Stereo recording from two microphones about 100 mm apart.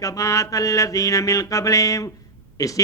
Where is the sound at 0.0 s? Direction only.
35° left (ahead or behind).